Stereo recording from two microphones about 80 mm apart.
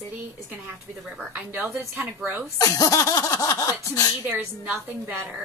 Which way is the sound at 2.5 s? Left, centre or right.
Left.